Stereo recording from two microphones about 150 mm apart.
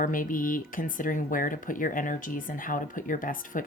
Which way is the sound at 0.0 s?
65° left (ahead or behind).